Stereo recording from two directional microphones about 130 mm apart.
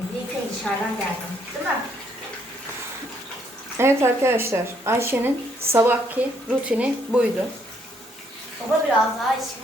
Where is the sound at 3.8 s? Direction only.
20° right (ahead or behind).